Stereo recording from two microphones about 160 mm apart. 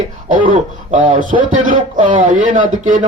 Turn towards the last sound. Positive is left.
turn(degrees=-50)  # may be behind; listen again after turning